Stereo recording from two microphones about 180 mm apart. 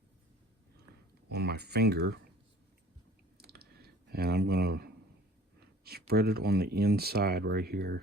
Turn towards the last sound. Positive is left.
turn(degrees=-60)  # may be behind; listen again after turning